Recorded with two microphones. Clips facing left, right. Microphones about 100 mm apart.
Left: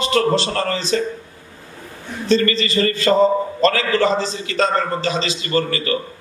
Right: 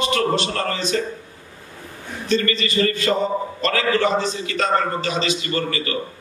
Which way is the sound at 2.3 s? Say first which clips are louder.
Left 4 dB; 30° left (ahead or behind).